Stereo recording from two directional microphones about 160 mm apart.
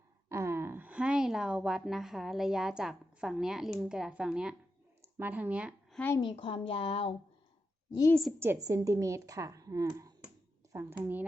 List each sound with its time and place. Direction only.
0.3 s speech: 15° right (ahead or behind)
6.1 s a woman's voice: 35° left (ahead or behind)
8.4 s speech: 15° right (ahead or behind)